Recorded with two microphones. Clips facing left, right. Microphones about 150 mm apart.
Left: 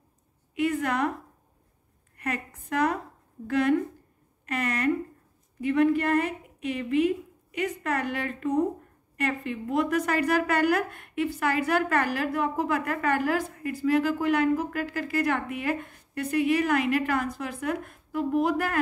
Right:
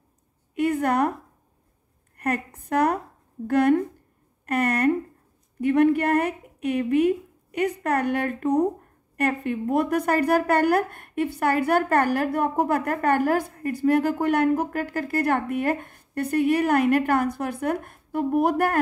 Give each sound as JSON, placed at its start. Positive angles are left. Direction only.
{"t": 0.6, "sound": "a woman's voice", "side_deg": -50}
{"t": 2.1, "sound": "a woman's voice", "side_deg": -55}